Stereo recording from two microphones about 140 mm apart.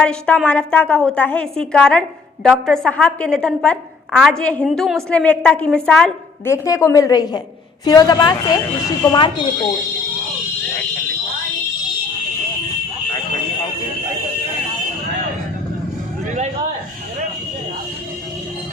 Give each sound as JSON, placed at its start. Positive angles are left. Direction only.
{"t": 0.0, "sound": "a woman's voice", "side_deg": 5}
{"t": 6.4, "sound": "a woman's voice", "side_deg": 20}